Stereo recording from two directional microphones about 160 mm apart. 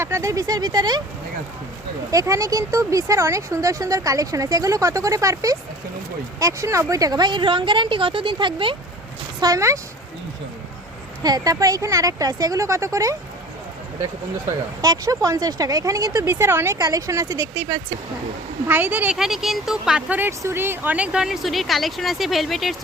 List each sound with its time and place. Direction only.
0.0 s speech: 15° right (ahead or behind)
2.0 s speech: 20° right (ahead or behind)
9.4 s speech: 20° right (ahead or behind)
11.2 s speech: 25° right (ahead or behind)
14.8 s speech: 20° right (ahead or behind); by 22.7 s centre (ahead or behind)